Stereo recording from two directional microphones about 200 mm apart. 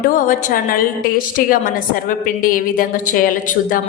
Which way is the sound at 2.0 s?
45° left (ahead or behind).